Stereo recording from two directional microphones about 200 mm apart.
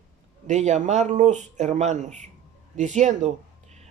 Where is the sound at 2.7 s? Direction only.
35° right (ahead or behind).